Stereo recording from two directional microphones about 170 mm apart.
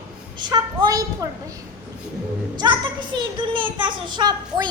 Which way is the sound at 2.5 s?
25° right (ahead or behind).